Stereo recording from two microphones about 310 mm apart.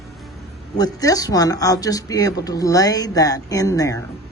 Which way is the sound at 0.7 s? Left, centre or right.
Centre.